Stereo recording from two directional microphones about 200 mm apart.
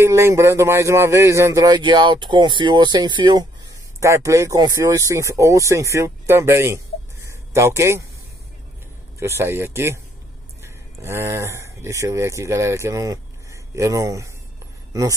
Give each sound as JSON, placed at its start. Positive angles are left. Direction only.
{"t": 0.0, "sound": "speech", "side_deg": -15}
{"t": 7.2, "sound": "a sound", "side_deg": -15}
{"t": 9.2, "sound": "speech", "side_deg": -15}
{"t": 11.0, "sound": "speech", "side_deg": -15}